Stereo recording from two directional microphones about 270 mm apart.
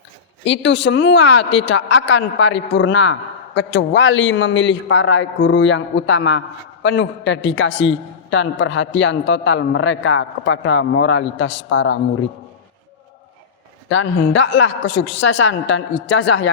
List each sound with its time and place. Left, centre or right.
0.4 s a woman's voice: left
13.9 s a woman's voice: left